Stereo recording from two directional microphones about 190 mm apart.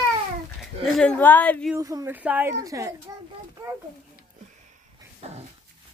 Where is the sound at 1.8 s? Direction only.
15° right (ahead or behind).